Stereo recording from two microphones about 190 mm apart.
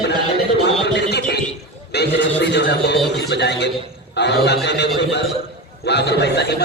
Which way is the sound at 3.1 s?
65° left (ahead or behind).